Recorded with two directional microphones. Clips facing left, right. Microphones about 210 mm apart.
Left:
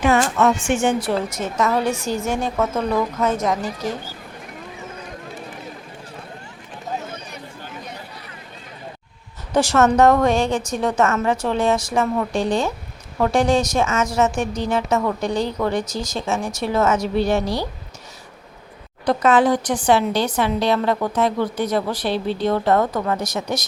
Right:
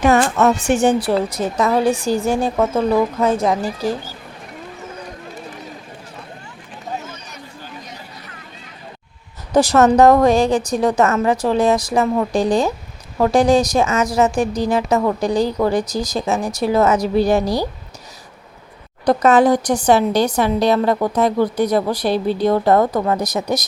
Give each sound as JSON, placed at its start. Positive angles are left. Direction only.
{"t": 0.3, "sound": "a woman's voice", "side_deg": -40}
{"t": 9.5, "sound": "a woman's voice", "side_deg": -35}
{"t": 19.0, "sound": "a woman's voice", "side_deg": -40}